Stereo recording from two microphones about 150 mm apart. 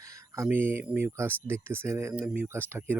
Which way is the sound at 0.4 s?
15° right (ahead or behind).